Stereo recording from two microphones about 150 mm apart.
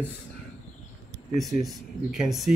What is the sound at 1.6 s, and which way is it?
Speech, centre (ahead or behind).